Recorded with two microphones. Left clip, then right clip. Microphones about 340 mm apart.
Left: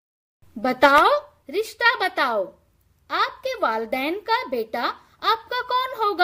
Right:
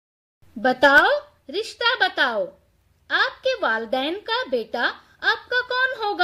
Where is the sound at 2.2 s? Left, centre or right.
Left.